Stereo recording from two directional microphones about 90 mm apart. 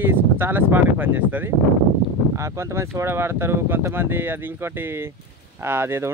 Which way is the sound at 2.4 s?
35° right (ahead or behind).